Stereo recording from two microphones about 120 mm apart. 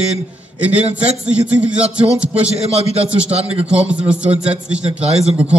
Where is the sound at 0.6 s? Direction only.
10° right (ahead or behind).